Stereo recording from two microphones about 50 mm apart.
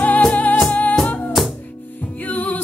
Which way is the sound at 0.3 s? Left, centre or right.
Left.